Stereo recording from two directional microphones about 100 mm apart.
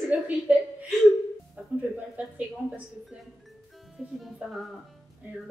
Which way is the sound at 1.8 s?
15° right (ahead or behind).